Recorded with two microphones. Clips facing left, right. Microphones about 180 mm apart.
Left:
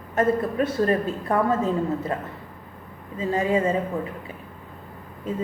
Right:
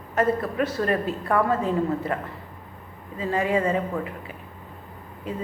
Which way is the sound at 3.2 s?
25° left (ahead or behind).